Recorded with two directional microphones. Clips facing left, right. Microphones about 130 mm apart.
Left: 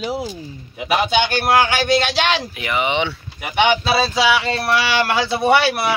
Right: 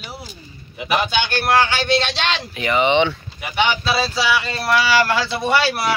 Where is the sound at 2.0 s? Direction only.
10° left (ahead or behind).